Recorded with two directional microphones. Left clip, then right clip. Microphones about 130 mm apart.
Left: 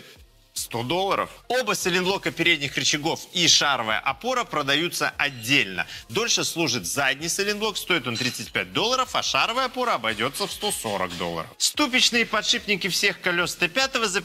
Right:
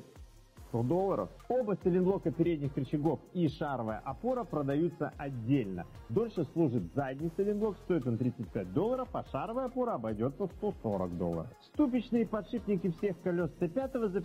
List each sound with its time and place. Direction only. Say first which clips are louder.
1.0 s speech: left 9 dB; 25° right (ahead or behind)
1.6 s speech: left 8 dB; 40° right (ahead or behind)
2.4 s a man's voice: left 13 dB; 45° right (ahead or behind); by 4.6 s 25° right (ahead or behind)
4.6 s a man's voice: left 10 dB; 45° right (ahead or behind)
6.2 s speech: left 12 dB; 50° right (ahead or behind)
9.8 s speech: left 10 dB; 30° right (ahead or behind)
10.8 s speech: left 8 dB; 25° right (ahead or behind)
11.7 s speech: left 10 dB; 40° right (ahead or behind)